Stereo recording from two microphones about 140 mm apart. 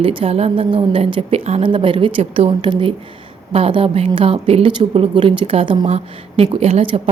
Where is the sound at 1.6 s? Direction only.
35° right (ahead or behind).